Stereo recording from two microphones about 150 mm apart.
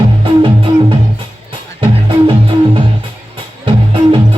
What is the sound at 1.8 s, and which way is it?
Music, 35° right (ahead or behind).